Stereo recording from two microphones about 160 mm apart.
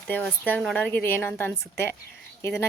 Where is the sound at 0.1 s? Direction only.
10° left (ahead or behind).